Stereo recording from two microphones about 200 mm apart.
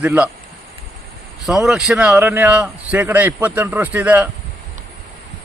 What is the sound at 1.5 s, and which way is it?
A man's voice, centre (ahead or behind).